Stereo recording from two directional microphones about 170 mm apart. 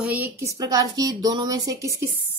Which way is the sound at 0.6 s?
20° right (ahead or behind).